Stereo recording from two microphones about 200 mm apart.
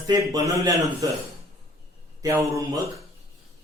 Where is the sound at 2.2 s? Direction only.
20° right (ahead or behind).